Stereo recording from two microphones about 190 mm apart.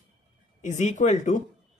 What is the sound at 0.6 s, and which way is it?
Speech, 40° left (ahead or behind).